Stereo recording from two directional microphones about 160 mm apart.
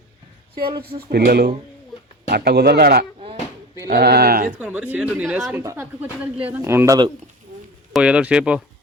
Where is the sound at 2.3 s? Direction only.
90° right; by 4.5 s 70° right (ahead or behind).